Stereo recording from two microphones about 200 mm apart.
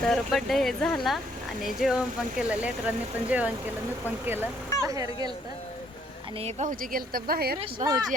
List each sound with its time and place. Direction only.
0.0 s speech: centre (ahead or behind)
4.8 s speech: 15° right (ahead or behind)
6.4 s speech: 40° right (ahead or behind)
7.8 s speech: 35° right (ahead or behind)